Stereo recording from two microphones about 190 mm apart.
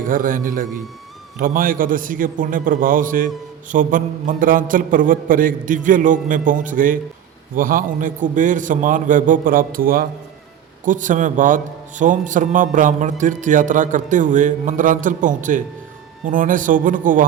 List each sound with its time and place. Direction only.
0.1 s a man's voice: 45° right (ahead or behind)